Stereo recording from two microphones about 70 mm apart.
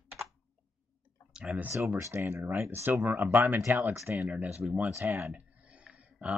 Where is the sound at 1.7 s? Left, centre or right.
Right.